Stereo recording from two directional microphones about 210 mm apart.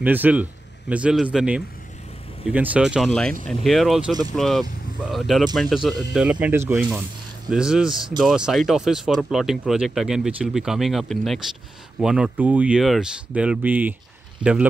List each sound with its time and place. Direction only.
0.0 s speech: 10° right (ahead or behind)
4.1 s speech: 20° right (ahead or behind)
4.4 s speech: centre (ahead or behind)